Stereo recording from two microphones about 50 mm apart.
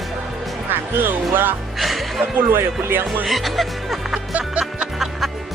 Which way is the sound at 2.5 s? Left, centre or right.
Right.